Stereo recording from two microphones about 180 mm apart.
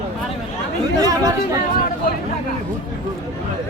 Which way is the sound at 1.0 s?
20° right (ahead or behind).